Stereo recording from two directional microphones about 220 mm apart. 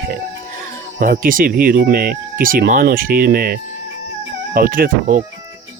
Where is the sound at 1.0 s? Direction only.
40° right (ahead or behind).